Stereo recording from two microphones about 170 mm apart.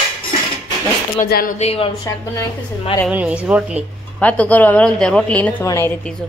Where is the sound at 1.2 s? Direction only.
60° left (ahead or behind).